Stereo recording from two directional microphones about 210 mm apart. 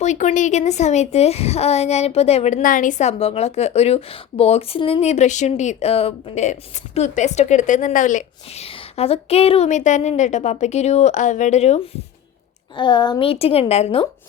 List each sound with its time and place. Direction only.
0.0 s a woman's voice: 35° left (ahead or behind)